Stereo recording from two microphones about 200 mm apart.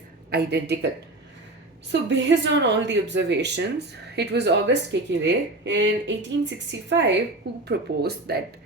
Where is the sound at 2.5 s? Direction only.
60° right (ahead or behind).